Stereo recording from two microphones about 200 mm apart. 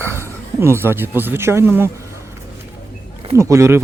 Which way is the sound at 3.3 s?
15° right (ahead or behind).